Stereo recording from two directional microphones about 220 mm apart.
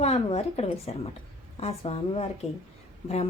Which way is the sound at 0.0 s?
30° left (ahead or behind).